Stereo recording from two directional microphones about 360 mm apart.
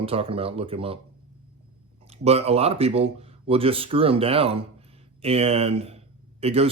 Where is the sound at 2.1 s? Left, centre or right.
Centre.